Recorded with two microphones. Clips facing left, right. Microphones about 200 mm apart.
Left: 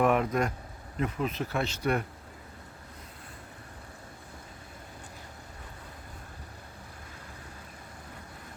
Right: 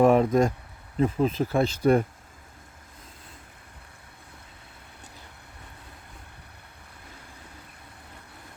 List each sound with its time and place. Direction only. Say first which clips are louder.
0.0 s speech: right 7 dB; 30° right (ahead or behind)